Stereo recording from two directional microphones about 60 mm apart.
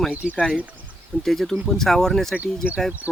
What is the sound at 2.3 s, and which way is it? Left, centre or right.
Speech, right.